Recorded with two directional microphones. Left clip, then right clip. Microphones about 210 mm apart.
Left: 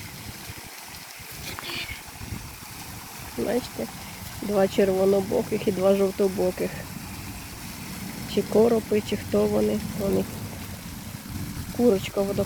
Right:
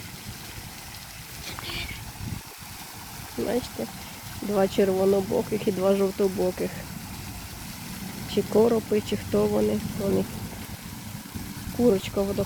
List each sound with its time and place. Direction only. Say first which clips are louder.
1.6 s vehicle: left 1 dB; 50° left (ahead or behind)
3.4 s speech: left 1 dB; centre (ahead or behind)
8.3 s speech: left 1 dB; centre (ahead or behind)
11.8 s speech: left 1 dB; centre (ahead or behind)